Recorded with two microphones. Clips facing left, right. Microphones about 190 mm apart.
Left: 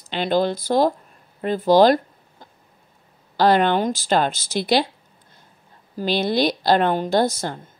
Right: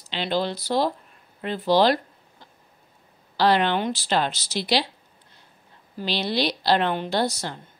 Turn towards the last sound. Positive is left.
turn(degrees=50)  # may be behind; listen again after turning